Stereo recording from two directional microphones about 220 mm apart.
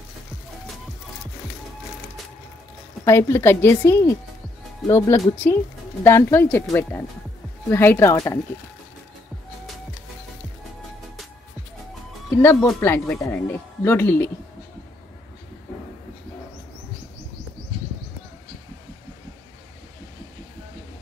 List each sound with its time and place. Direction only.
3.1 s speech: 10° left (ahead or behind)
12.4 s speech: 5° left (ahead or behind)